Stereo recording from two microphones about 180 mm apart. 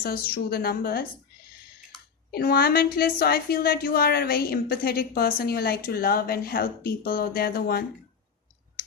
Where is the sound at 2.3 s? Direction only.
55° left (ahead or behind).